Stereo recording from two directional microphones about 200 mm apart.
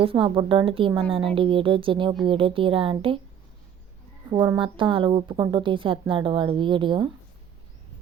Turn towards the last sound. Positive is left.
turn(degrees=-25)  # may be behind; listen again after turning